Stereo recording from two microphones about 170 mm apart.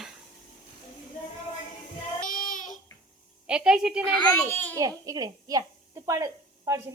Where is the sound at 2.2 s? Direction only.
55° left (ahead or behind).